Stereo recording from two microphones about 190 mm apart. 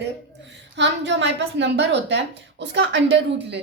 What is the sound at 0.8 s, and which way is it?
A woman's voice, 70° right (ahead or behind).